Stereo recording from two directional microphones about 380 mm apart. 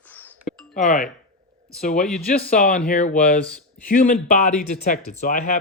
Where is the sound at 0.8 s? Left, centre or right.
Left.